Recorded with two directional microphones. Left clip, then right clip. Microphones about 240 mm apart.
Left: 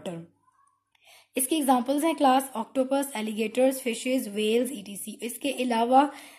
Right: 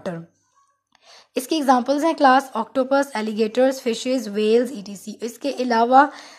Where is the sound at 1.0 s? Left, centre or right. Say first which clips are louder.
Right 5 dB; right.